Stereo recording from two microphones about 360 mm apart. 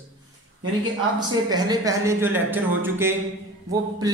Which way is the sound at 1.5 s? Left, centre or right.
Centre.